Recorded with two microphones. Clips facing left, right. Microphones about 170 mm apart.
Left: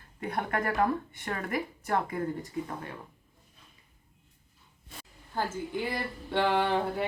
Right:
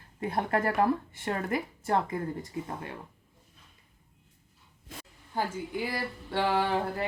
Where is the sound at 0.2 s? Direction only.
30° right (ahead or behind).